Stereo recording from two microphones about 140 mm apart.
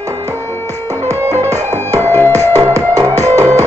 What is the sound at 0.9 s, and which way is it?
Music, 20° right (ahead or behind).